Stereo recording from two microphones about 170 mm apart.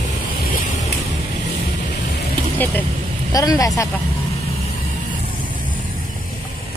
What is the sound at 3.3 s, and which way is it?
Speech, 20° left (ahead or behind).